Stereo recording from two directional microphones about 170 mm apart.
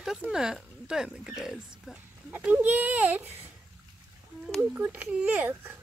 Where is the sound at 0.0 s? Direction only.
5° right (ahead or behind).